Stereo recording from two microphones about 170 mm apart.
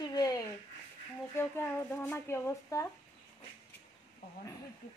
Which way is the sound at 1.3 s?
15° left (ahead or behind).